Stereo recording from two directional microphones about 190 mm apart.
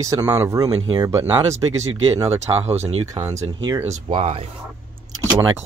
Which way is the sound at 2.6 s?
35° right (ahead or behind).